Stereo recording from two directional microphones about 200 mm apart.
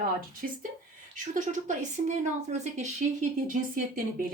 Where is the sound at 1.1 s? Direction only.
40° right (ahead or behind).